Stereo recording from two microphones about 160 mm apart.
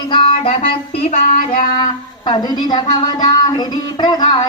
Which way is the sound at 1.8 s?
30° left (ahead or behind).